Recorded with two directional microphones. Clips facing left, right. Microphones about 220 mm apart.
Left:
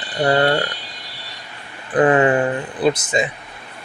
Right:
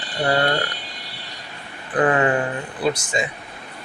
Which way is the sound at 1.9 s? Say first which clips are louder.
Left 4 dB; 25° left (ahead or behind).